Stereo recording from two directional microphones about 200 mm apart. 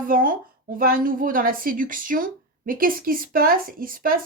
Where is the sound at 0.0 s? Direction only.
45° right (ahead or behind).